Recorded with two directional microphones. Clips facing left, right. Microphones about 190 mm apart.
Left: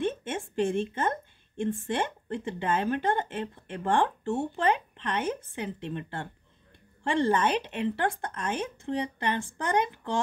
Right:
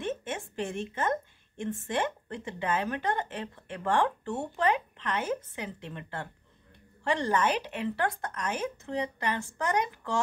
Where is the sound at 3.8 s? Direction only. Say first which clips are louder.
Left 1 dB; 25° left (ahead or behind).